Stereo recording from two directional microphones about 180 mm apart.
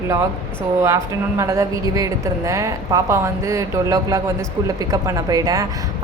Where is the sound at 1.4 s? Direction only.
15° right (ahead or behind).